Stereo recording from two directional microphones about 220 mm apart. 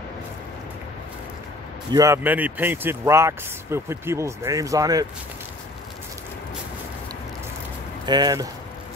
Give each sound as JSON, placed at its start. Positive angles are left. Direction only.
{"t": 1.9, "sound": "speech", "side_deg": -15}
{"t": 8.0, "sound": "speech", "side_deg": -20}